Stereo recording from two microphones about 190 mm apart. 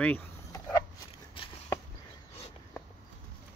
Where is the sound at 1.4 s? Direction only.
25° left (ahead or behind).